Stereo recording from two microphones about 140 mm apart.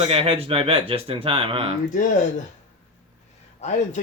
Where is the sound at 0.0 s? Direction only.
40° right (ahead or behind).